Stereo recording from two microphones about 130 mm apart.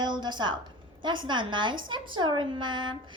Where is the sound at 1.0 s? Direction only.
35° right (ahead or behind).